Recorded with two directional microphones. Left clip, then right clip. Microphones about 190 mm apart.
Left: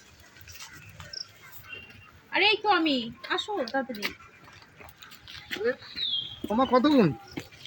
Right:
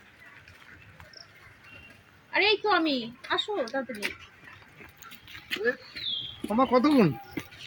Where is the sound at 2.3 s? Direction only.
60° left (ahead or behind).